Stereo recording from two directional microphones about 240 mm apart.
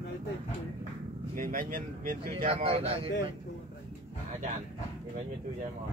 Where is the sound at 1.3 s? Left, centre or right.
Right.